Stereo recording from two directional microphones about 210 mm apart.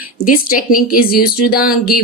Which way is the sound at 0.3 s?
40° left (ahead or behind).